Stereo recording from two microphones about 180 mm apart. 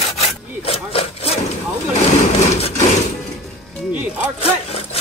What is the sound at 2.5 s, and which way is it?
Wood, 35° left (ahead or behind).